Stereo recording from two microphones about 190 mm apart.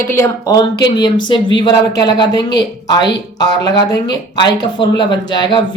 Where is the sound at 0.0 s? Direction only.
15° left (ahead or behind).